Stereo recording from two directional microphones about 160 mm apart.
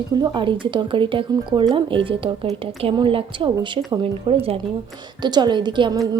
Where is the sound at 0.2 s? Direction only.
30° right (ahead or behind).